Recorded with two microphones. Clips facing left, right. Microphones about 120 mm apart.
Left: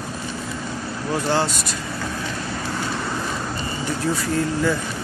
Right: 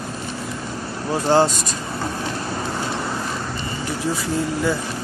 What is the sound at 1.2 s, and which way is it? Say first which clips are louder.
Speech: right 6 dB; 35° right (ahead or behind).